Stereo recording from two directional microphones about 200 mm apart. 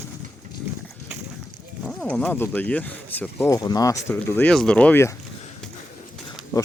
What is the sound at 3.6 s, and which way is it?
Speech, 20° left (ahead or behind).